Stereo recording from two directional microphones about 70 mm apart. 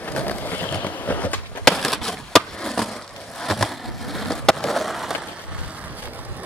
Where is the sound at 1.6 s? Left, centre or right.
Centre.